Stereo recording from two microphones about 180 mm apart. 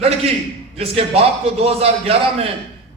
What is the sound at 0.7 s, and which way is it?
A man's voice, 35° right (ahead or behind).